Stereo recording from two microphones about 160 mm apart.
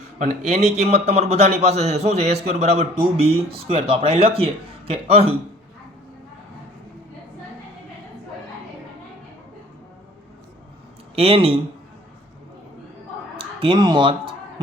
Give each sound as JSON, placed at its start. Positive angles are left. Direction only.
{"t": 0.2, "sound": "a man's voice", "side_deg": -45}
{"t": 11.1, "sound": "speech", "side_deg": -35}
{"t": 13.3, "sound": "speech", "side_deg": -35}